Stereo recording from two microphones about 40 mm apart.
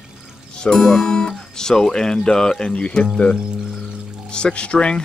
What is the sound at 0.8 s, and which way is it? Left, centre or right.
Speech, centre.